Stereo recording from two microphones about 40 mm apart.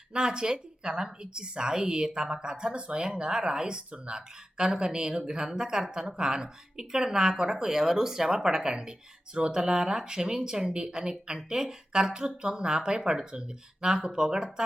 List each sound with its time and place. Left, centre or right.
0.1 s a woman's voice: centre